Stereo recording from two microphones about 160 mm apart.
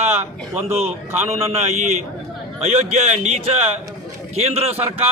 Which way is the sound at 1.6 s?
45° right (ahead or behind).